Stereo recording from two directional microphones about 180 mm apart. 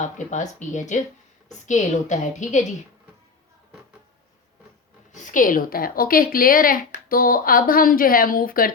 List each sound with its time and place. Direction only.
0.0 s speech: 40° left (ahead or behind)
5.1 s a woman's voice: 45° left (ahead or behind)